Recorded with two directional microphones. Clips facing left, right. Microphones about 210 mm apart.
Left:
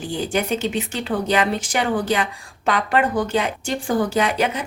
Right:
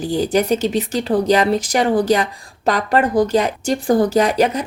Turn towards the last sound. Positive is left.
turn(degrees=-40)  # may be behind; listen again after turning